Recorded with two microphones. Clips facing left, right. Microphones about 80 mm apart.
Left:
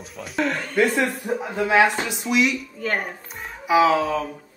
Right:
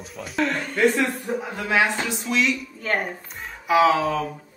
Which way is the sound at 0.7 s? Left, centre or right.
Centre.